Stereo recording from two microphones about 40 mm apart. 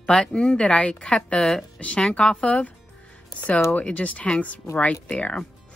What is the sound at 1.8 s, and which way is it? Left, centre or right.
Speech, left.